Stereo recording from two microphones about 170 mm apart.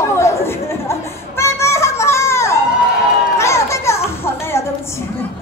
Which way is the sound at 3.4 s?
15° left (ahead or behind).